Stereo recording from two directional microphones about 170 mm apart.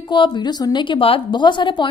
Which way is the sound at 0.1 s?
25° left (ahead or behind).